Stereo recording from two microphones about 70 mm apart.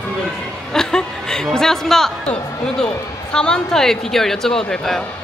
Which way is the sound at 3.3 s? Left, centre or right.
Centre.